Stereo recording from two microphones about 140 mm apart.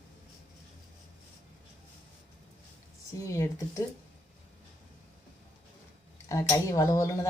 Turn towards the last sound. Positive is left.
turn(degrees=20)  # may be behind; listen again after turning